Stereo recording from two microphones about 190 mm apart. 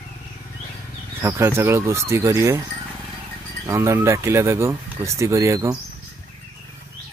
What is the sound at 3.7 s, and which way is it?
Speech, 15° right (ahead or behind).